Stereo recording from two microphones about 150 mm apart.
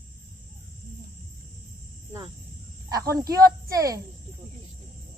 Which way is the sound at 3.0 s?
20° right (ahead or behind).